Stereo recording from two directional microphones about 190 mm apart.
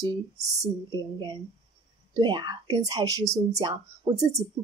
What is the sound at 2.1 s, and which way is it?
A woman's voice, 25° right (ahead or behind).